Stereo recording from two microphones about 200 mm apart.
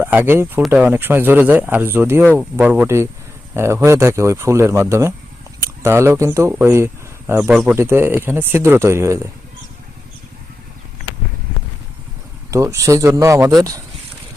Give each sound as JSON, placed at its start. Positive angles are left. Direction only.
{"t": 0.0, "sound": "speech", "side_deg": -10}
{"t": 12.5, "sound": "speech", "side_deg": -15}